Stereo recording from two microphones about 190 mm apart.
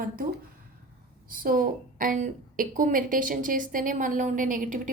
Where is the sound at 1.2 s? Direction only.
45° right (ahead or behind).